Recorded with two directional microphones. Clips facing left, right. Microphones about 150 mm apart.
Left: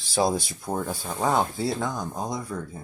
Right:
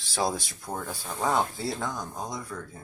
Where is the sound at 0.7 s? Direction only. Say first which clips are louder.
Left 5 dB; 20° left (ahead or behind).